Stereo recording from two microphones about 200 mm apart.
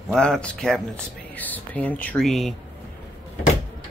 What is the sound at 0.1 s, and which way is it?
Speech, 5° left (ahead or behind).